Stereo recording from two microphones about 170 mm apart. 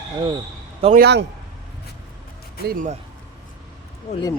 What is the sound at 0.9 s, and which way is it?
Speech, 70° right (ahead or behind).